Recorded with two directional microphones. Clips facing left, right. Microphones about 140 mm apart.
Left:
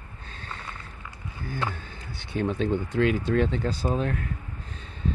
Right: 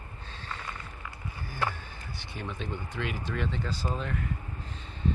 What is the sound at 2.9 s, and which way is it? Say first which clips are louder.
Speech: left 12 dB; 55° left (ahead or behind).